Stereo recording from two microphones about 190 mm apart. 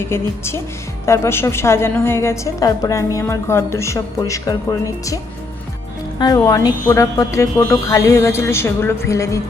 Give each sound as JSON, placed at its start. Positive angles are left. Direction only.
{"t": 0.0, "sound": "a woman's voice", "side_deg": 15}